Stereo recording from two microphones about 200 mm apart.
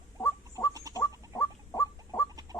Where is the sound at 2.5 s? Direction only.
20° right (ahead or behind).